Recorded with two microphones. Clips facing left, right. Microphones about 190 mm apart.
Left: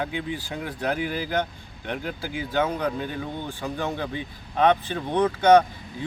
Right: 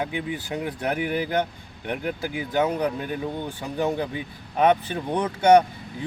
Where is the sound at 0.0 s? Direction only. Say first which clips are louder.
Right 1 dB; 15° right (ahead or behind).